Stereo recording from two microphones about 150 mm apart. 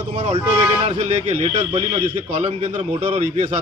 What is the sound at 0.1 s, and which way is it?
A man's voice, 40° right (ahead or behind).